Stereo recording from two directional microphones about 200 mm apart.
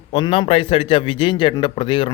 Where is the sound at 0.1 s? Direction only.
30° left (ahead or behind).